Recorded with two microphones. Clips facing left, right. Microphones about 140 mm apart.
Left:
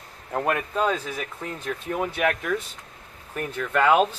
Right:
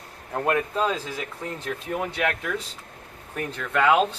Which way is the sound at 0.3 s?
5° left (ahead or behind).